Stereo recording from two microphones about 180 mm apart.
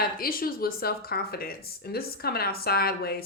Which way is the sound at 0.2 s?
55° left (ahead or behind).